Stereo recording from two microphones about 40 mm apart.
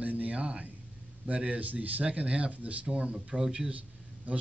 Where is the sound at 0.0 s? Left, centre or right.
Right.